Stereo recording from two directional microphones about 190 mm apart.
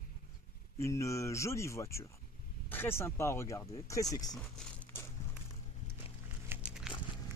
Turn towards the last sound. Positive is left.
turn(degrees=-5)  # may be behind; listen again after turning